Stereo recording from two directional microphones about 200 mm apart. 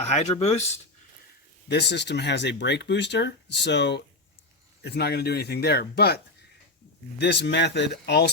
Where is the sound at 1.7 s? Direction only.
55° left (ahead or behind).